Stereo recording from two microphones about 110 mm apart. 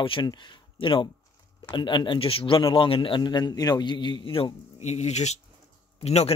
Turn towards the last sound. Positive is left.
turn(degrees=75)  # may be behind; listen again after turning